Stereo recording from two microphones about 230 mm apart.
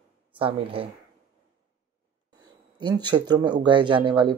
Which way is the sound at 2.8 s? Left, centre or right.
Centre.